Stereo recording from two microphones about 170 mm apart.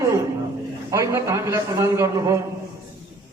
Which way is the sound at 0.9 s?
15° right (ahead or behind).